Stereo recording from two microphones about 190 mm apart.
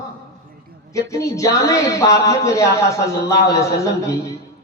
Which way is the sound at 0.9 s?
15° left (ahead or behind).